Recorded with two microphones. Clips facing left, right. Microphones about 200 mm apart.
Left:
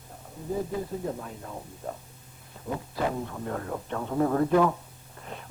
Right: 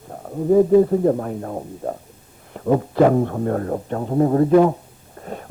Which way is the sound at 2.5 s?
65° right (ahead or behind).